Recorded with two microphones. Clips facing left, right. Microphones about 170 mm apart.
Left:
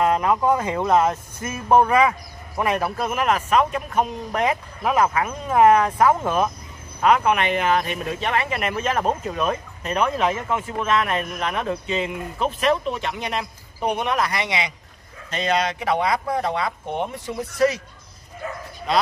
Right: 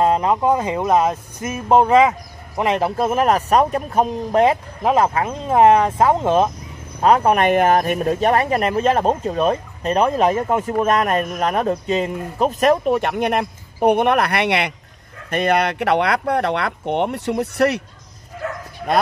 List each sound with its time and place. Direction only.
0.0 s speech: 25° right (ahead or behind)
7.0 s speech: 35° right (ahead or behind); by 17.8 s 65° right (ahead or behind)
18.4 s bow-wow: 80° right